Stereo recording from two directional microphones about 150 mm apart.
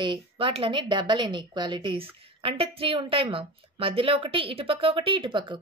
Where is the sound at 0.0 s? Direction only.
35° right (ahead or behind).